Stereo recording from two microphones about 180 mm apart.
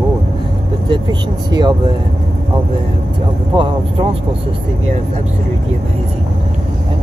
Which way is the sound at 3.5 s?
30° right (ahead or behind).